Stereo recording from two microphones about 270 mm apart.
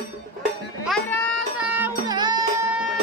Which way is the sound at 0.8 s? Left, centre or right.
Centre.